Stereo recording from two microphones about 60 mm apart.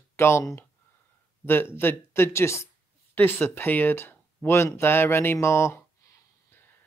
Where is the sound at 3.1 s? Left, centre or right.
Left.